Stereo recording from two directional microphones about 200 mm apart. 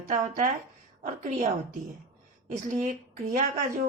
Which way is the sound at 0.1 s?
40° right (ahead or behind).